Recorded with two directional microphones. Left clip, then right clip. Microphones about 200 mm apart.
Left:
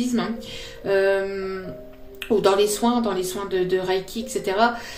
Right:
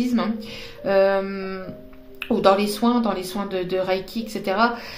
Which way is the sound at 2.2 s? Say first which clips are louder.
Even; 30° right (ahead or behind).